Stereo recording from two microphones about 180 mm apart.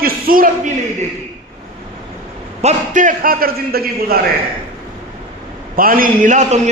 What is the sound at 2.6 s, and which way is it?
A man's voice, 40° right (ahead or behind).